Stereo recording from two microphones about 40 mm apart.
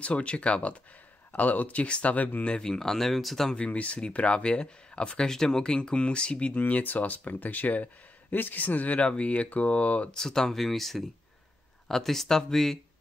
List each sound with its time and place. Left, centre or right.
0.0 s speech: left
1.3 s speech: left
2.1 s speech: left
2.6 s speech: centre
3.5 s speech: left
5.3 s speech: centre
6.5 s speech: left
9.0 s speech: left
9.3 s speech: left
10.1 s speech: centre
10.5 s speech: centre